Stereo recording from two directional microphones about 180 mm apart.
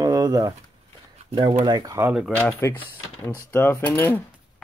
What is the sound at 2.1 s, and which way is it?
Speech, centre (ahead or behind).